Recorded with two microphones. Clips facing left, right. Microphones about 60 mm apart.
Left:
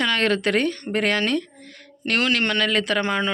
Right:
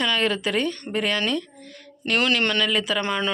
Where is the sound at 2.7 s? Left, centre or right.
Left.